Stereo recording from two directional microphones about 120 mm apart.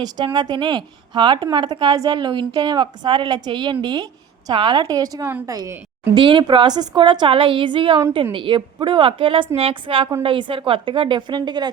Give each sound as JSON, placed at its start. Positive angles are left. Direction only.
{"t": 0.3, "sound": "a woman's voice", "side_deg": -35}
{"t": 6.1, "sound": "a woman's voice", "side_deg": -45}